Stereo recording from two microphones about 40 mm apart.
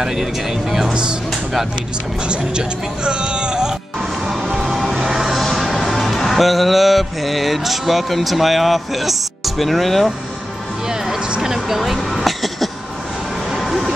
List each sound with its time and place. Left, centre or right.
0.0 s speech: centre
2.2 s speech: right
4.5 s vehicle: centre
5.4 s music: centre
11.4 s speech: centre
12.1 s a sound: centre